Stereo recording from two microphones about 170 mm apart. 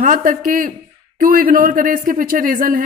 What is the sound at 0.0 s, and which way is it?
A woman's voice, 55° right (ahead or behind).